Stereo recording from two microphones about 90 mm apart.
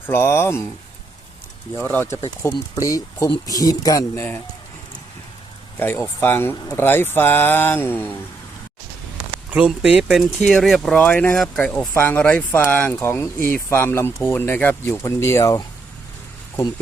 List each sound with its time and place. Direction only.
0.0 s speech: 25° left (ahead or behind)
1.8 s speech: 20° left (ahead or behind)
2.0 s speech: 30° left (ahead or behind)
5.8 s speech: 25° left (ahead or behind)
9.5 s speech: 10° right (ahead or behind)
10.4 s speech: 5° left (ahead or behind)
10.9 s speech: 15° left (ahead or behind)
11.9 s speech: 20° left (ahead or behind)